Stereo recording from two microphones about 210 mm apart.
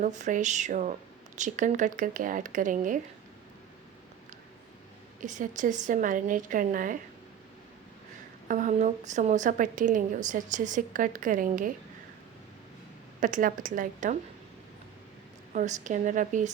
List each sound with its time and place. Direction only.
0.0 s a woman's voice: 35° right (ahead or behind)
5.2 s a woman's voice: 35° right (ahead or behind)
8.4 s a woman's voice: 35° right (ahead or behind)
13.1 s a woman's voice: 40° right (ahead or behind)
15.5 s a woman's voice: 35° right (ahead or behind)